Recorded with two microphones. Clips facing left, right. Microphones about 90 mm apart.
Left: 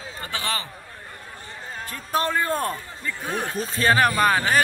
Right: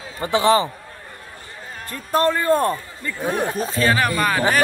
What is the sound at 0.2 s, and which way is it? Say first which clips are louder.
Speech: right 13 dB; 20° right (ahead or behind).